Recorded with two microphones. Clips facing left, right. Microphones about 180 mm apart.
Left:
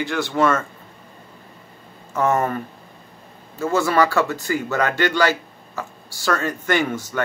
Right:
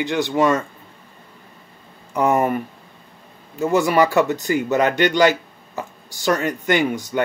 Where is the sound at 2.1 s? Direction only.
15° right (ahead or behind).